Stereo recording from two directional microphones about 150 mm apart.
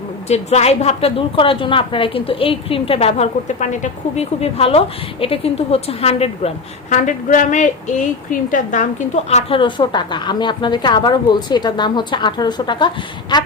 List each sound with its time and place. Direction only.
0.3 s a woman's voice: 45° left (ahead or behind)
6.9 s a woman's voice: 55° left (ahead or behind)
9.6 s a woman's voice: 30° left (ahead or behind)